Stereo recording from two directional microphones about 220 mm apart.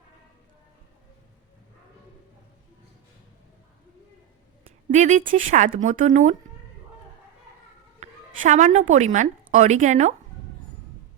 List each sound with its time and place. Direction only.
4.9 s speech: 30° right (ahead or behind)
7.9 s a sound: 35° right (ahead or behind)
8.9 s speech: 30° right (ahead or behind)